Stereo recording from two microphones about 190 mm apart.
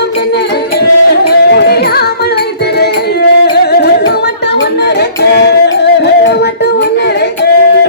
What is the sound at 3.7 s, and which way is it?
Music, 55° left (ahead or behind).